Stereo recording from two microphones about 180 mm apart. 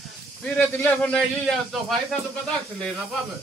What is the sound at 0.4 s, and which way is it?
A man's voice, 10° left (ahead or behind).